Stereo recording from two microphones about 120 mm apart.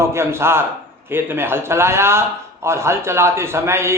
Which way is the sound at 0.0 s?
20° right (ahead or behind).